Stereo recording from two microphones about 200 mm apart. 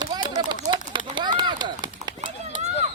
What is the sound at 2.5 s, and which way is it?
Run, 40° left (ahead or behind).